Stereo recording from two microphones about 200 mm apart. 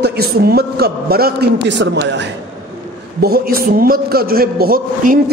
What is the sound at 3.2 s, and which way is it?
A man's voice, 50° right (ahead or behind).